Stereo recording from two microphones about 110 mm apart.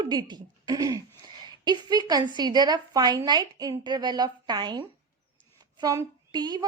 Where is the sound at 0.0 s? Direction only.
40° right (ahead or behind).